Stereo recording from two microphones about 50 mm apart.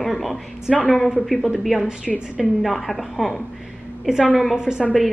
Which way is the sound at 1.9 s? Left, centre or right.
Centre.